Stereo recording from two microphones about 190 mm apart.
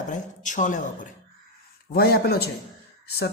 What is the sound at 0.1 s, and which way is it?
Speech, 40° left (ahead or behind).